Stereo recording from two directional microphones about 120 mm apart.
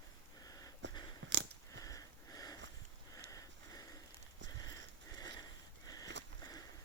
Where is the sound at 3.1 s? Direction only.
30° left (ahead or behind).